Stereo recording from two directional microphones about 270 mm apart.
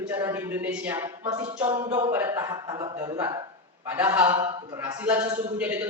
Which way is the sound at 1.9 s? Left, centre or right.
Centre.